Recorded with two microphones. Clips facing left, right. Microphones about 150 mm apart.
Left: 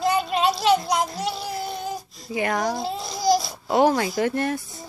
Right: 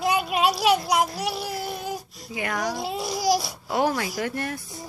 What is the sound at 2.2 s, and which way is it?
Speech, 35° left (ahead or behind).